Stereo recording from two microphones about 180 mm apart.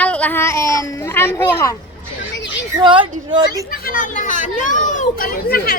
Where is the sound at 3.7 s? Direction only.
55° left (ahead or behind).